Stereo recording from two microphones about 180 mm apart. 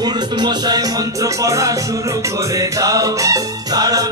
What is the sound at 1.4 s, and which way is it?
Music, 15° right (ahead or behind).